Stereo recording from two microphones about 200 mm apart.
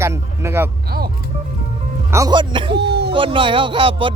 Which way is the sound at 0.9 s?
45° right (ahead or behind).